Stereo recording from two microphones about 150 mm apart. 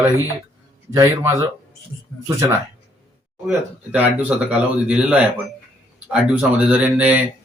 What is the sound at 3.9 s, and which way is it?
Speech, 10° right (ahead or behind).